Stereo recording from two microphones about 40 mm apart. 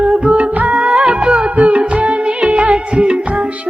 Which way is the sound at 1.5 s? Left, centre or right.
Right.